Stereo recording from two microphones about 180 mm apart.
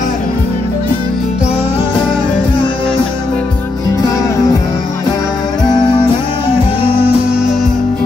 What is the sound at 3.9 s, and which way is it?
Music, 15° left (ahead or behind).